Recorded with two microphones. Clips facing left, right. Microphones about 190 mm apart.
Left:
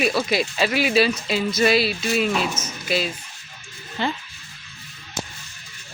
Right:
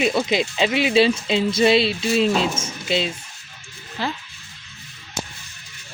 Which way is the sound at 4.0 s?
Centre (ahead or behind).